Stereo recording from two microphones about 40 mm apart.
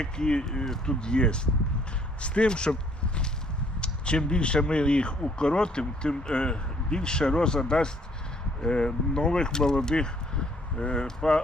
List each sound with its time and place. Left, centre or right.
0.0 s speech: left